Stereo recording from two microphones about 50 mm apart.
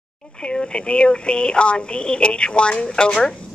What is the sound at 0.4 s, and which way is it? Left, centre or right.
A woman's voice, left.